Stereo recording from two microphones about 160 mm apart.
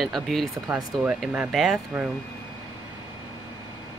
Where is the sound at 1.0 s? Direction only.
10° right (ahead or behind).